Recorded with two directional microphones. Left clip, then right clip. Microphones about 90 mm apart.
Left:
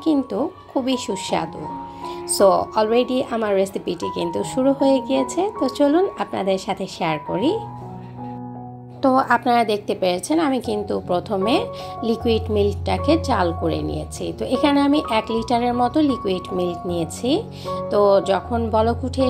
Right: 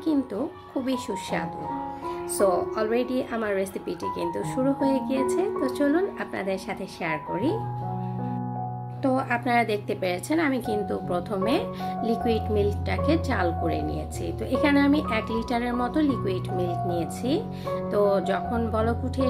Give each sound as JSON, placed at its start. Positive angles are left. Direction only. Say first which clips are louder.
{"t": 0.0, "sound": "a woman's voice", "louder": "left 6 dB", "side_deg": 40}
{"t": 9.0, "sound": "a woman's voice", "louder": "left 9 dB", "side_deg": 50}